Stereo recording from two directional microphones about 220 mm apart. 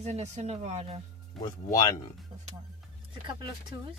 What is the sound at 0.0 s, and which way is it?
Speech, 30° right (ahead or behind).